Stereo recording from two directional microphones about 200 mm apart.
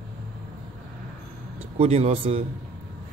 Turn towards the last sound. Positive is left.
turn(degrees=-30)  # may be behind; listen again after turning